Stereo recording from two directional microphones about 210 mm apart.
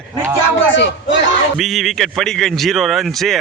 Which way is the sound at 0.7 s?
60° left (ahead or behind).